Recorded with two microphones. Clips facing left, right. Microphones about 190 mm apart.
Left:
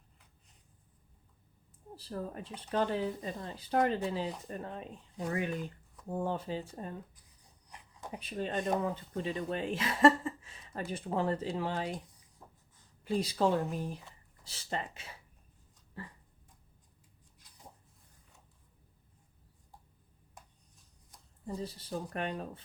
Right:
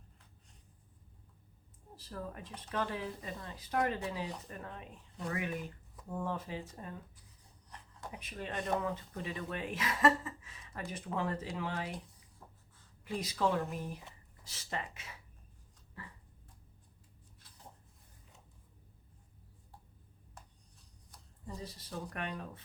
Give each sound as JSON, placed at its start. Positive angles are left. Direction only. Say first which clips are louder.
{"t": 2.0, "sound": "speech", "louder": "left 4 dB", "side_deg": 30}
{"t": 7.7, "sound": "a sound", "louder": "even", "side_deg": 10}
{"t": 8.1, "sound": "speech", "louder": "left 6 dB", "side_deg": 30}
{"t": 12.4, "sound": "a sound", "louder": "left 1 dB", "side_deg": 5}
{"t": 13.1, "sound": "speech", "louder": "left 4 dB", "side_deg": 30}
{"t": 21.4, "sound": "speech", "louder": "left 6 dB", "side_deg": 30}